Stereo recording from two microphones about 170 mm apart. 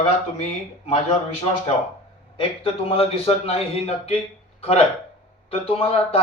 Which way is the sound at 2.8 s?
35° left (ahead or behind).